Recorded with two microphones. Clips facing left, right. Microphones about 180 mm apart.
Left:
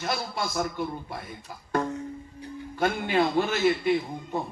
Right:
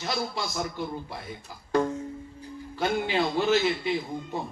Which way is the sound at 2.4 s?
50° left (ahead or behind).